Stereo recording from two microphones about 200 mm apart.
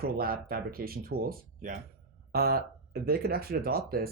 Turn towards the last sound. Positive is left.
turn(degrees=-50)  # may be behind; listen again after turning